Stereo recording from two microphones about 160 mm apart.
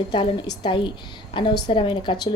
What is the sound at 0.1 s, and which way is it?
A woman's voice, 30° left (ahead or behind).